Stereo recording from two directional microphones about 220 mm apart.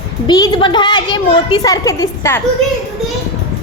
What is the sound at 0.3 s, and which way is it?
A woman's voice, 15° left (ahead or behind).